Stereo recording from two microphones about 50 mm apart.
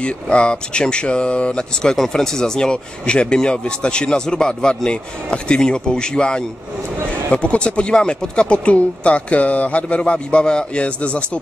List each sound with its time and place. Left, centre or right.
0.0 s speech: left